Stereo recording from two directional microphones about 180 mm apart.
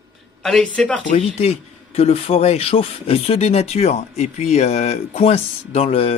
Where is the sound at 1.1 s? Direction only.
35° left (ahead or behind).